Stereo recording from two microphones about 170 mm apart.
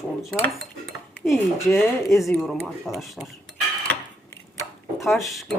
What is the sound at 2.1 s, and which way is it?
Speech, centre (ahead or behind).